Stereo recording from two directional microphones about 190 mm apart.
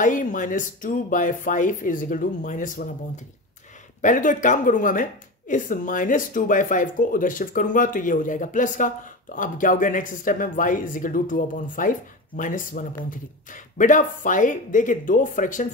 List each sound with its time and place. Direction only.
0.0 s speech: 40° left (ahead or behind)
4.0 s speech: 45° left (ahead or behind)